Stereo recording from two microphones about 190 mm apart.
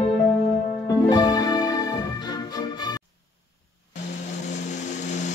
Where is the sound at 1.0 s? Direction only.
20° left (ahead or behind).